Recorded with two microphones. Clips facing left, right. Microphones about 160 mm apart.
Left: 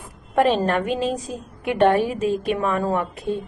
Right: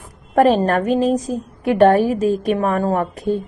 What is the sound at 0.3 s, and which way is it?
A woman's voice, 40° right (ahead or behind).